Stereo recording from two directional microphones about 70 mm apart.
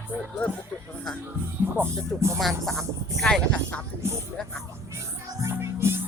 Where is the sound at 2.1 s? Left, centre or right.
Right.